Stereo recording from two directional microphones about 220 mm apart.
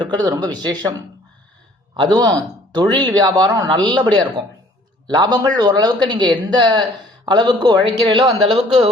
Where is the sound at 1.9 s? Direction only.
20° right (ahead or behind).